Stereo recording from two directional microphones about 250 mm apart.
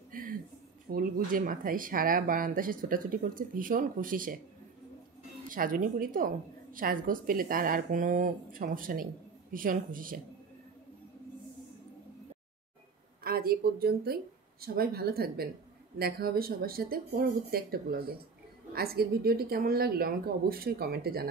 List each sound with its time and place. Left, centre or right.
0.1 s a sound: right
0.8 s a woman's voice: right
5.5 s a woman's voice: right
13.2 s a woman's voice: right